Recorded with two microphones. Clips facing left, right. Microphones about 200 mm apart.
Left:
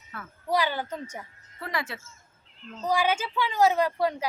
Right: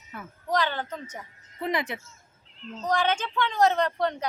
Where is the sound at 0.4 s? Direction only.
10° left (ahead or behind).